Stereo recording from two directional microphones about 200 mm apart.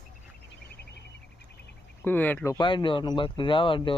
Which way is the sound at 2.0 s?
10° left (ahead or behind).